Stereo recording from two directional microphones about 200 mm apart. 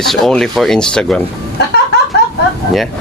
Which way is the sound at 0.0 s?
Centre (ahead or behind).